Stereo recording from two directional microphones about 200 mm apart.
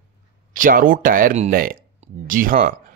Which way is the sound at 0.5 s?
45° right (ahead or behind).